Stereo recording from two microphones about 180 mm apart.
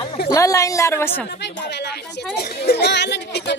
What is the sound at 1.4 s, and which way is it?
Speech, 70° left (ahead or behind).